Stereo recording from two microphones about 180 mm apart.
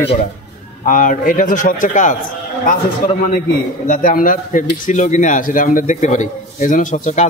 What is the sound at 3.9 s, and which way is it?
Speech, 50° left (ahead or behind).